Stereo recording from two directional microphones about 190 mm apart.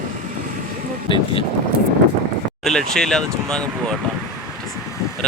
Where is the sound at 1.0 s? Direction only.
25° left (ahead or behind).